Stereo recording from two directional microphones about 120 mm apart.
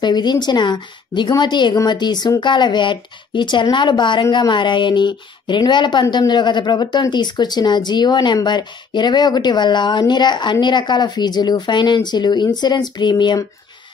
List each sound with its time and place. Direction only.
0.0 s speech: 35° left (ahead or behind)